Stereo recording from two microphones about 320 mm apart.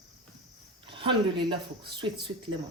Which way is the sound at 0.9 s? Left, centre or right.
Centre.